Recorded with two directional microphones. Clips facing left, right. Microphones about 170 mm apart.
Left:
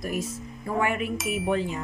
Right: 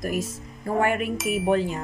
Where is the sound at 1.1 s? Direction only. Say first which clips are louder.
Right 3 dB; centre (ahead or behind).